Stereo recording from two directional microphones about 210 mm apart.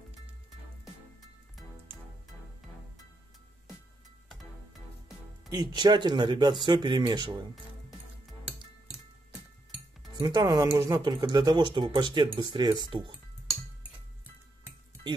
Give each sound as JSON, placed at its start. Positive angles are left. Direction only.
{"t": 5.5, "sound": "speech", "side_deg": -20}
{"t": 10.2, "sound": "speech", "side_deg": -20}